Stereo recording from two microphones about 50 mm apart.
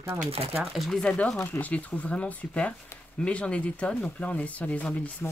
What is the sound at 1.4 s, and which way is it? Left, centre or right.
Speech, left.